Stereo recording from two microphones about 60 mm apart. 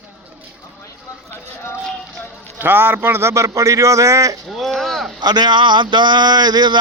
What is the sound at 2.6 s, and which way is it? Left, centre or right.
A man's voice, right.